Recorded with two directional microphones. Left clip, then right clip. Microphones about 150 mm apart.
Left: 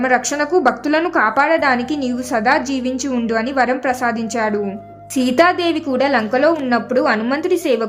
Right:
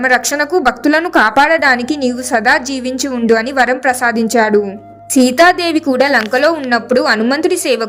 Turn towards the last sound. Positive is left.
turn(degrees=-35)  # may be behind; listen again after turning